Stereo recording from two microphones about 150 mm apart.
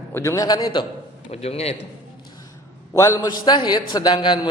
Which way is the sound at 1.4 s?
45° left (ahead or behind).